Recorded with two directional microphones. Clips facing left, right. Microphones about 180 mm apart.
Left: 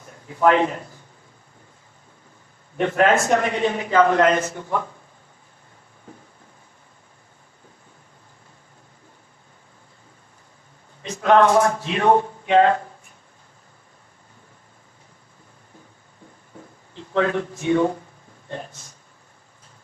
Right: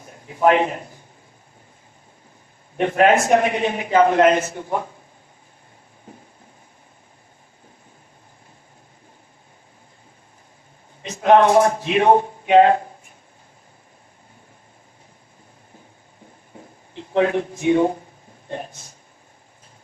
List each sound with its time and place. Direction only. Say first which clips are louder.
0.3 s a man's voice: right 1 dB; 15° right (ahead or behind)
2.8 s a man's voice: right 2 dB; 20° right (ahead or behind)
11.0 s a man's voice: right 2 dB; 20° right (ahead or behind)
16.9 s speech: right 3 dB; 20° right (ahead or behind)